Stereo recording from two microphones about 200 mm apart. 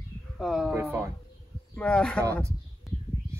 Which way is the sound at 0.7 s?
10° right (ahead or behind).